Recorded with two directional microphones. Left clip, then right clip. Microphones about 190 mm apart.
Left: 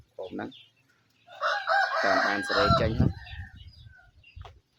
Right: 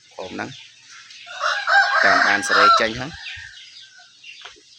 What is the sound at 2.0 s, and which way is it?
Chicken, centre (ahead or behind).